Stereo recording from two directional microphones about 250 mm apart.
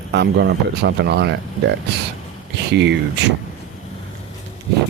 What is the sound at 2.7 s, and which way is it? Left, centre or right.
Speech, right.